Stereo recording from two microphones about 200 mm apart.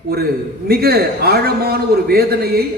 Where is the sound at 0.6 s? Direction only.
50° right (ahead or behind).